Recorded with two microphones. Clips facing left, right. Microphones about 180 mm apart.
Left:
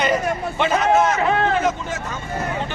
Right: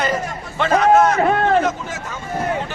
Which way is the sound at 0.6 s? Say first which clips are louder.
Right 4 dB; centre (ahead or behind).